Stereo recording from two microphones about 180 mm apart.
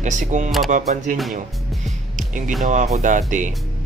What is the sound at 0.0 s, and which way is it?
Speech, 45° right (ahead or behind).